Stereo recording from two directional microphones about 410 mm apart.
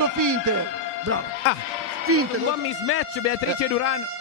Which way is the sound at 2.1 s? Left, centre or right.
Right.